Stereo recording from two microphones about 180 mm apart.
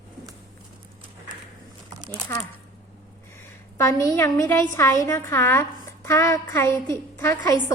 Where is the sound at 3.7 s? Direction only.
15° left (ahead or behind).